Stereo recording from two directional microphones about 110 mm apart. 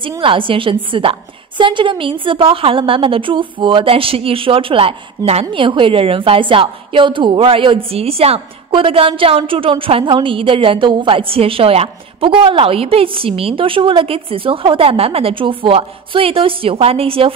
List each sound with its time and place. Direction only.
0.2 s a woman's voice: 55° right (ahead or behind)